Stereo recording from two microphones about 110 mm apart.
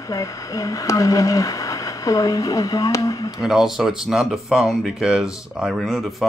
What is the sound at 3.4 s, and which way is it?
Speech, 5° right (ahead or behind).